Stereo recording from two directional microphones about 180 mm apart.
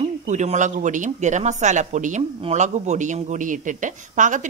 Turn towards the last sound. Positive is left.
turn(degrees=-45)  # may be behind; listen again after turning